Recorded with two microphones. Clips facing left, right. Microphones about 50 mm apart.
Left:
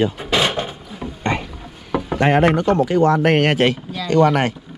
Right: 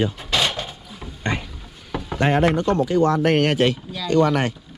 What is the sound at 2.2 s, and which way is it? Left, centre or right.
Speech, left.